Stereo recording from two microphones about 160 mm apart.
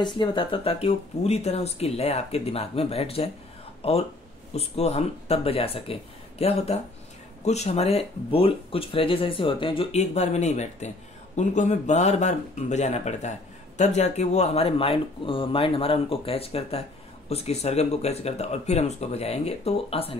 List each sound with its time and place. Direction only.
0.0 s speech: 30° left (ahead or behind)